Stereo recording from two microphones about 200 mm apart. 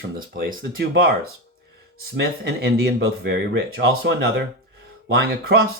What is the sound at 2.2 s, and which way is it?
Speech, 55° right (ahead or behind).